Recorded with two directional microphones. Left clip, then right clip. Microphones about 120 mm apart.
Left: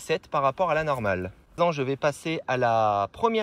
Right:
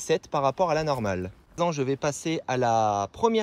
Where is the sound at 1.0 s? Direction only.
25° right (ahead or behind).